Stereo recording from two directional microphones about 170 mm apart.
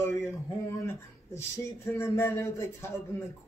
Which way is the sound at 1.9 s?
15° left (ahead or behind).